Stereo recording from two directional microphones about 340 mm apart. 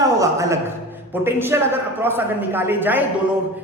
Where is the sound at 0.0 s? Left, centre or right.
Centre.